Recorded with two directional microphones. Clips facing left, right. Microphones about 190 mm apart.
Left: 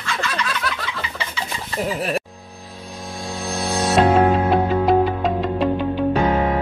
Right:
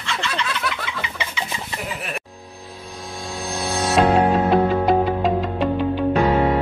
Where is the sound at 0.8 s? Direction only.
15° right (ahead or behind).